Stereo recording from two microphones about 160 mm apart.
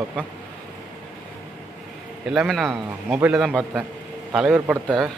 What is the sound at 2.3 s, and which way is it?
A man's voice, centre (ahead or behind).